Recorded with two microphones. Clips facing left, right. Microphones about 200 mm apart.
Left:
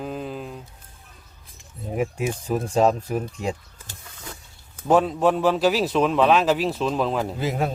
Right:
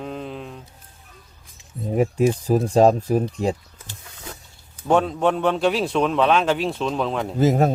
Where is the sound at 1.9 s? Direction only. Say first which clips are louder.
Right 6 dB; 35° right (ahead or behind).